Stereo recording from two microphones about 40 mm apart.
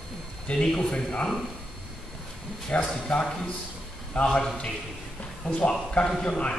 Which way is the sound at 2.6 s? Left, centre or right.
Left.